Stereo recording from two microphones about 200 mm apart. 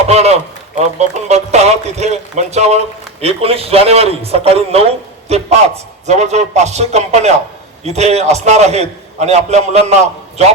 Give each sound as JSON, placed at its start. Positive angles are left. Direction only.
{"t": 0.1, "sound": "a man's voice", "side_deg": -35}